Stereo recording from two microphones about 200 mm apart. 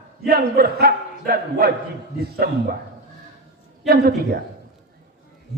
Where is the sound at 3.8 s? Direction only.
50° right (ahead or behind).